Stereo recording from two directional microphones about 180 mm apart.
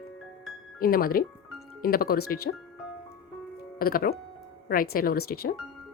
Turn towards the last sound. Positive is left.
turn(degrees=60)  # may be behind; listen again after turning